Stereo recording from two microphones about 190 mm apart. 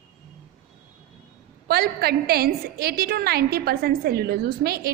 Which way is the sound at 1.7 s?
55° right (ahead or behind).